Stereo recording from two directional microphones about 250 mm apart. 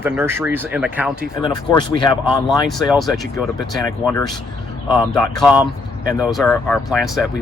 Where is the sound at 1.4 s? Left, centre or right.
Centre.